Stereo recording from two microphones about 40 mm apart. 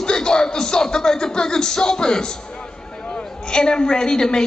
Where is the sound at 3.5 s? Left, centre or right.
Left.